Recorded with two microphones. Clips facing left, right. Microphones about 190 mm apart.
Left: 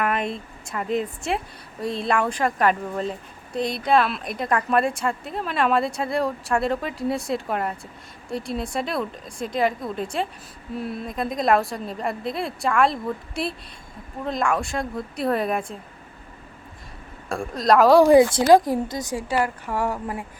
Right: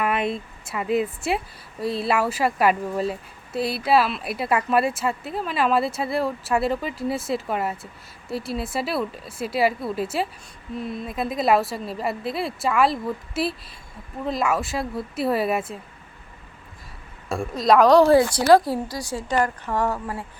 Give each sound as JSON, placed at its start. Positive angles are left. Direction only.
{"t": 0.0, "sound": "speech", "side_deg": -5}
{"t": 17.2, "sound": "a woman's voice", "side_deg": 0}